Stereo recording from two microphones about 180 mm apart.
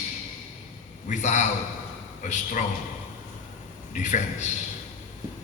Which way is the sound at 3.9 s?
45° left (ahead or behind).